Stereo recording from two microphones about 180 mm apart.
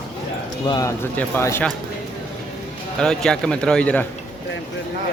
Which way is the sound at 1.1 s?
15° left (ahead or behind).